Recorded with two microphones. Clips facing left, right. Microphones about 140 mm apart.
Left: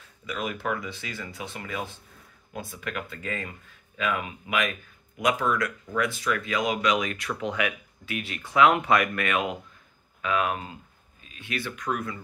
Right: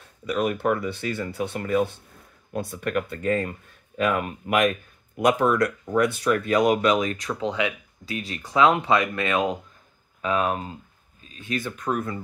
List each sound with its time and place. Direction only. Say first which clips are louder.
0.8 s speech: right 9 dB; 60° right (ahead or behind)
5.4 s speech: right 6 dB; 35° right (ahead or behind)